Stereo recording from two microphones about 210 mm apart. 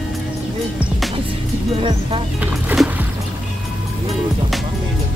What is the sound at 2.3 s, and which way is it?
Music, 5° right (ahead or behind).